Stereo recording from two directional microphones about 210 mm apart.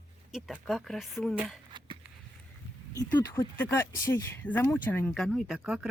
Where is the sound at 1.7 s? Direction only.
25° right (ahead or behind).